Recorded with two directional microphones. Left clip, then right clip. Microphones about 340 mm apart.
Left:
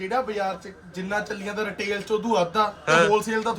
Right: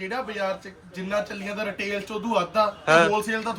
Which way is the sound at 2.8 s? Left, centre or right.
Centre.